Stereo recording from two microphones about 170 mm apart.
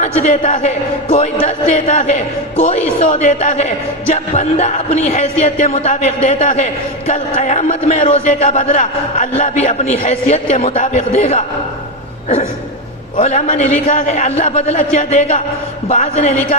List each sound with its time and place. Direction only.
0.0 s a woman's voice: 45° left (ahead or behind)
13.1 s a man's voice: 40° left (ahead or behind)